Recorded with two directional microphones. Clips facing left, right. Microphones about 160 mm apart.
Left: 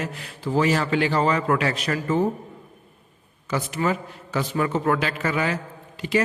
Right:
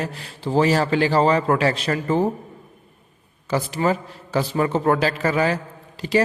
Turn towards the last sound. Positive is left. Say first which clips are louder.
# right 3 dB
turn(degrees=-35)  # may be behind; listen again after turning